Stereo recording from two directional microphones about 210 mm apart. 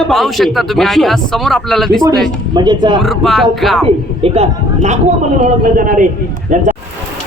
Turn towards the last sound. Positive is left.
turn(degrees=-35)  # may be behind; listen again after turning